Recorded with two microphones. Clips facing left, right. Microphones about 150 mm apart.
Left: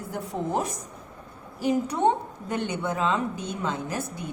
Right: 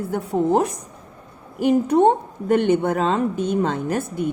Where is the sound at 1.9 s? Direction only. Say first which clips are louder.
Right 8 dB; 50° right (ahead or behind).